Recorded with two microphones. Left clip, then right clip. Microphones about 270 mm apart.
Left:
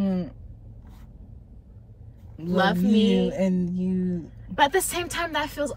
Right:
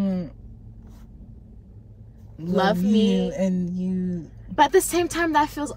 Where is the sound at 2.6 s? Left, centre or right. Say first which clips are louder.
Right 1 dB; centre.